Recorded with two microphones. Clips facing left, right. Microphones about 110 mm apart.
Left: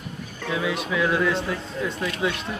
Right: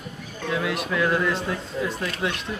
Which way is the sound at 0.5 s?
Centre (ahead or behind).